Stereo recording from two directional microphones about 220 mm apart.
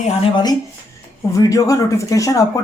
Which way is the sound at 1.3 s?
15° left (ahead or behind).